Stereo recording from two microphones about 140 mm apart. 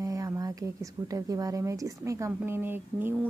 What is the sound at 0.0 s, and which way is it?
Speech, 25° right (ahead or behind).